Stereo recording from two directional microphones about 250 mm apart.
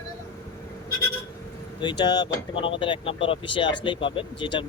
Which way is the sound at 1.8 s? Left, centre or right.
Centre.